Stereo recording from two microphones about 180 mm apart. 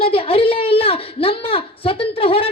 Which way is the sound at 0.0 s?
30° left (ahead or behind).